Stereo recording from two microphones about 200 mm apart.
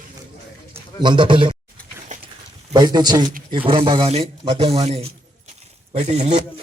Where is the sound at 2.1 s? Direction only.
35° right (ahead or behind).